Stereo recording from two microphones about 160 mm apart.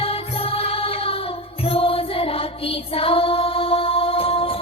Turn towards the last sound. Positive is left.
turn(degrees=35)  # may be behind; listen again after turning